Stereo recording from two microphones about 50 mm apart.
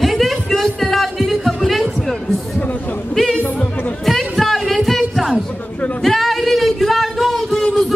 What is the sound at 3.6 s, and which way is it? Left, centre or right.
Music, left.